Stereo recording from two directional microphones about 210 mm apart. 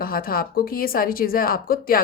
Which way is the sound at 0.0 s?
45° left (ahead or behind).